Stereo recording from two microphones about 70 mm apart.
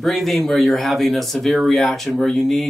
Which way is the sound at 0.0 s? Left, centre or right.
Centre.